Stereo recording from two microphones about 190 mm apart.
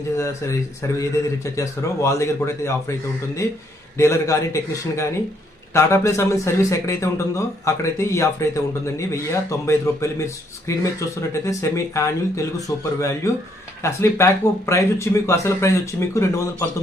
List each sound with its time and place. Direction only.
0.2 s a man's voice: 15° left (ahead or behind)